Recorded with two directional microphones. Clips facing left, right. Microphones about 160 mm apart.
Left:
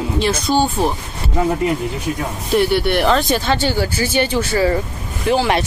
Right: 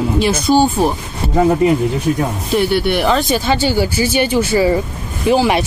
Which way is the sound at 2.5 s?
Centre (ahead or behind).